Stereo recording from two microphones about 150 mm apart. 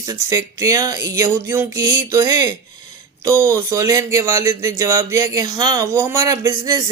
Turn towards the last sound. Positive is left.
turn(degrees=-25)  # may be behind; listen again after turning